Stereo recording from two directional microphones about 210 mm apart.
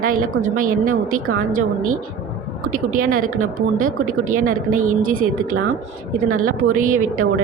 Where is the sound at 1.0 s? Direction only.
90° right.